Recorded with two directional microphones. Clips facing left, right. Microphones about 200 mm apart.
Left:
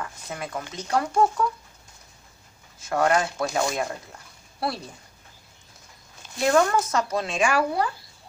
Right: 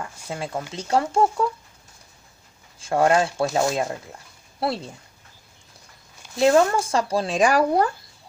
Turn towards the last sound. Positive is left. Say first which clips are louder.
# right 5 dB
turn(degrees=-40)  # may be behind; listen again after turning